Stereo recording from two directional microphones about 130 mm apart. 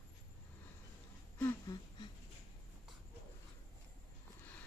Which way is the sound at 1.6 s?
35° left (ahead or behind).